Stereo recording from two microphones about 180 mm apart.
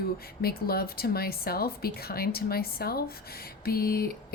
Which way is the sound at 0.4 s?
60° left (ahead or behind).